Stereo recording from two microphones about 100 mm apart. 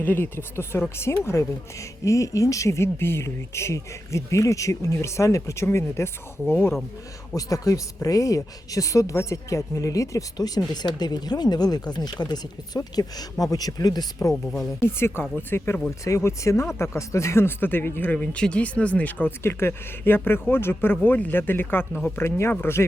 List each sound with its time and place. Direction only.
0.0 s speech: 20° left (ahead or behind)
7.3 s speech: 35° left (ahead or behind)
14.8 s speech: 25° left (ahead or behind)